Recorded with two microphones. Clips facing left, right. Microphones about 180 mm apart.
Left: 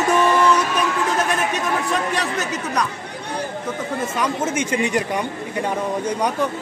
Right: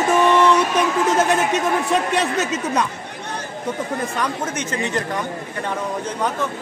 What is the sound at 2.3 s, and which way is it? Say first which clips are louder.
Speech: right 3 dB; 25° right (ahead or behind).